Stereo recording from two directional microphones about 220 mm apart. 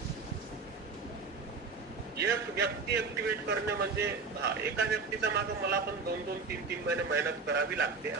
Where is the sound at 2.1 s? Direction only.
50° right (ahead or behind).